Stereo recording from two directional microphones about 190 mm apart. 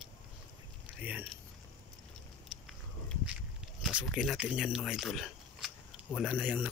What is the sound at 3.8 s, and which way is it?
Speech, 5° right (ahead or behind).